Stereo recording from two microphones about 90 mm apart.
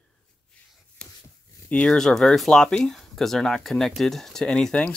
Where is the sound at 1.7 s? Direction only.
10° left (ahead or behind).